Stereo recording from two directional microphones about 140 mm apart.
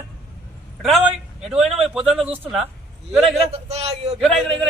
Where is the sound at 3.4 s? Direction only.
50° right (ahead or behind).